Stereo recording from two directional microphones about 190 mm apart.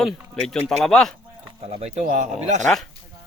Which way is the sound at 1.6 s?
30° right (ahead or behind).